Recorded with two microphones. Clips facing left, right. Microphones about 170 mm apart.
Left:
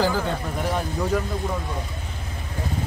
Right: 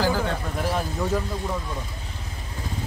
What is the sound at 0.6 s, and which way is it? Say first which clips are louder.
Speech: even; centre (ahead or behind).